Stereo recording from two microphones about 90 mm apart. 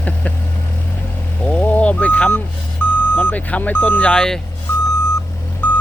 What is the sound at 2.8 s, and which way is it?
Reversing beeps, 20° left (ahead or behind).